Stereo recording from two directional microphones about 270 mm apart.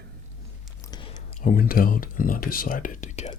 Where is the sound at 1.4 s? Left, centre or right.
Left.